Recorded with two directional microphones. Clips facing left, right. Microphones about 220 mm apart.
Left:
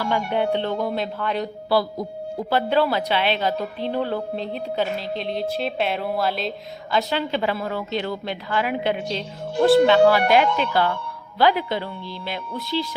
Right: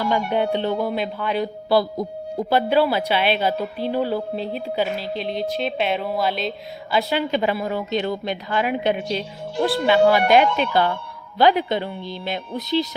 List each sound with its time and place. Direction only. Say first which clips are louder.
0.0 s a woman's voice: right 2 dB; 15° right (ahead or behind)
1.7 s a woman's voice: right 2 dB; 20° right (ahead or behind); by 6.5 s centre (ahead or behind)
6.9 s a woman's voice: right 2 dB; 15° right (ahead or behind)